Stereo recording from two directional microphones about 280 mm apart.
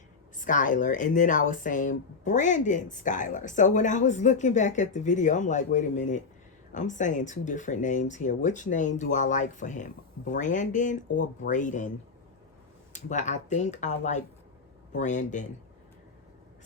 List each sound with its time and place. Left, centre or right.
0.4 s speech: left
12.9 s speech: left